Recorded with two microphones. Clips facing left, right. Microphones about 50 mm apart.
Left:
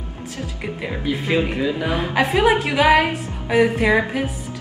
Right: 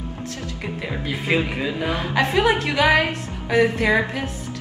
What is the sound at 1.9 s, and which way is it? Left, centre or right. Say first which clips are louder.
Music: even; left.